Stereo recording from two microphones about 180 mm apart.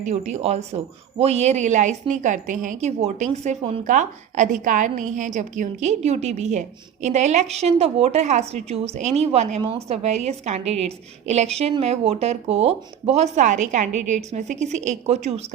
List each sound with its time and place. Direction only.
0.0 s a woman's voice: 40° right (ahead or behind)